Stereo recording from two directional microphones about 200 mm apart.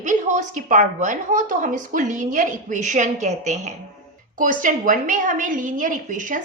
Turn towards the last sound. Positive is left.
turn(degrees=-40)  # may be behind; listen again after turning